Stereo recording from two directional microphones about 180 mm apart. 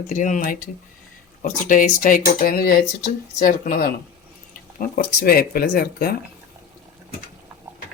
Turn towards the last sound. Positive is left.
turn(degrees=60)  # may be behind; listen again after turning